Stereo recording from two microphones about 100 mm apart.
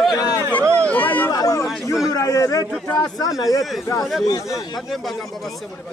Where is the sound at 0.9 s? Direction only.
15° left (ahead or behind).